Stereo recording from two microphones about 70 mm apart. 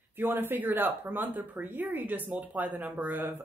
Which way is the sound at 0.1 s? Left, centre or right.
Right.